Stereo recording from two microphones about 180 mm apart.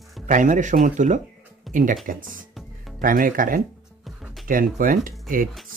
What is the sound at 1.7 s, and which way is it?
Music, centre (ahead or behind).